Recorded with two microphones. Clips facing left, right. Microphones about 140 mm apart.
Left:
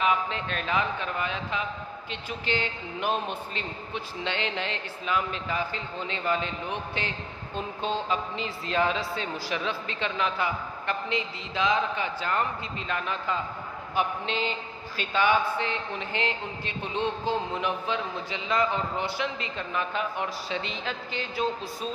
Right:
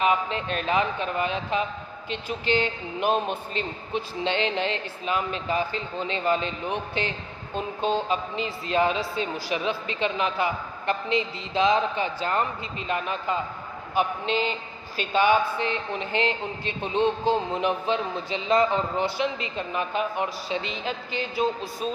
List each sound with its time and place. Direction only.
0.0 s a man's voice: 20° right (ahead or behind)
15.1 s a man's voice: 15° right (ahead or behind)